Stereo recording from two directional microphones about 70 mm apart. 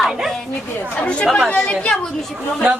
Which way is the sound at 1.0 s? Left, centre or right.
Centre.